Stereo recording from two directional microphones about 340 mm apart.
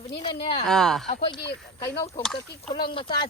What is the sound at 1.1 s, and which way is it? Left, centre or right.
Speech, centre.